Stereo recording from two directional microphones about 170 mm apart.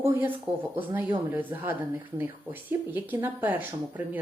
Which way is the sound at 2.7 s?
10° right (ahead or behind).